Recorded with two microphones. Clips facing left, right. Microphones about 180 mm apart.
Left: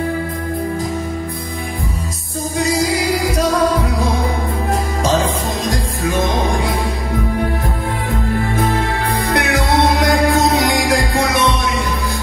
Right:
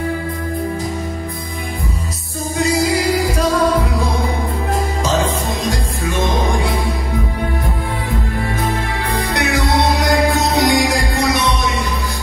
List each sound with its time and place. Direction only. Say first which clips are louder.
9.1 s music: even; 50° left (ahead or behind)